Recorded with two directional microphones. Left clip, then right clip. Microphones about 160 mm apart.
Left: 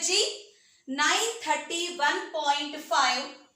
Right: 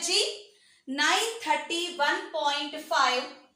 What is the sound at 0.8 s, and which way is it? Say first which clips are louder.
Speech: even; 50° right (ahead or behind).